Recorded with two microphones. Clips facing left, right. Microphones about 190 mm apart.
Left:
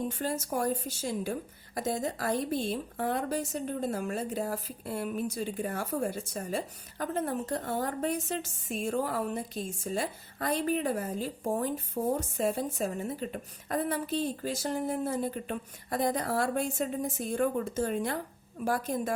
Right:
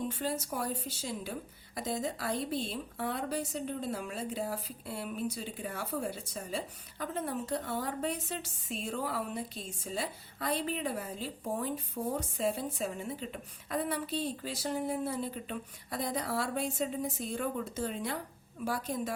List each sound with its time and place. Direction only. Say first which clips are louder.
0.2 s a woman's voice: left 4 dB; 45° left (ahead or behind)